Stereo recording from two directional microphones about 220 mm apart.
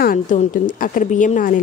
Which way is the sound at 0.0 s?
40° left (ahead or behind).